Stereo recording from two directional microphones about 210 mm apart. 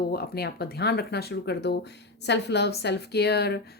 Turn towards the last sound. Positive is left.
turn(degrees=50)  # may be behind; listen again after turning